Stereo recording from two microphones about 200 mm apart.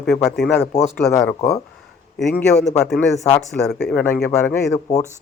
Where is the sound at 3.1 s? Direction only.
15° left (ahead or behind).